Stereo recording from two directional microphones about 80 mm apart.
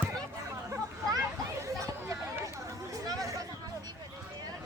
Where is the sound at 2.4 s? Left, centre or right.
Right.